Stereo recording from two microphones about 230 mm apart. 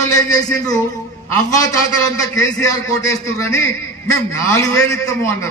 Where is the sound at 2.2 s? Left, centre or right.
Centre.